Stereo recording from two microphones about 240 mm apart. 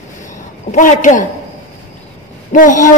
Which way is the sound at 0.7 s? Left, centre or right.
Left.